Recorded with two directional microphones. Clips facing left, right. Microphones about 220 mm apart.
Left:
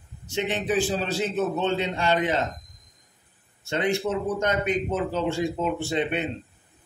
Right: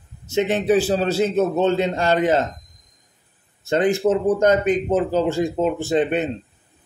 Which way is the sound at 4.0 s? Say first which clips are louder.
Right 9 dB; 45° right (ahead or behind).